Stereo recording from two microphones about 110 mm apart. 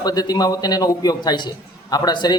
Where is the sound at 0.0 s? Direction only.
40° left (ahead or behind).